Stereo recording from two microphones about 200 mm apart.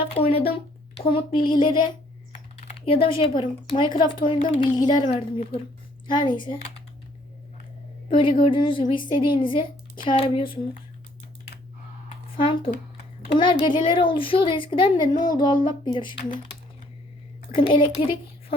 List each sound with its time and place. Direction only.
0.1 s a sound: 30° left (ahead or behind)
1.5 s speech: 25° left (ahead or behind)
8.1 s speech: 25° left (ahead or behind)
12.4 s speech: 25° left (ahead or behind)
17.5 s a child's voice: 25° left (ahead or behind)